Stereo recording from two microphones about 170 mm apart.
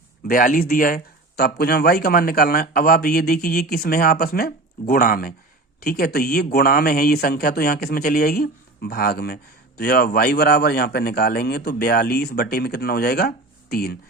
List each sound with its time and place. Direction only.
0.3 s a man's voice: 55° left (ahead or behind)